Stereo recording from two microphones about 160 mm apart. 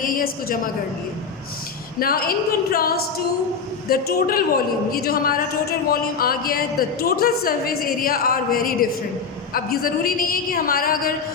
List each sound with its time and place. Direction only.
0.0 s a woman's voice: 65° left (ahead or behind)
2.0 s a woman's voice: 65° left (ahead or behind)